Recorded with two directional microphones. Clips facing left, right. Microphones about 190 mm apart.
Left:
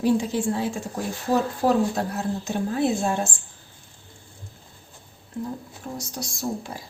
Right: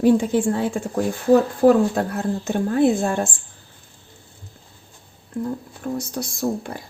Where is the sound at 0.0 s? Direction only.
55° right (ahead or behind).